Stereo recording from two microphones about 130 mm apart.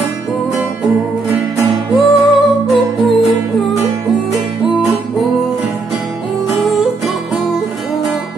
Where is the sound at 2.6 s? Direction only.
Centre (ahead or behind).